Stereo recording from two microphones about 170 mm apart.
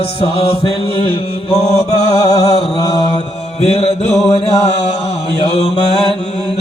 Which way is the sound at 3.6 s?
35° left (ahead or behind).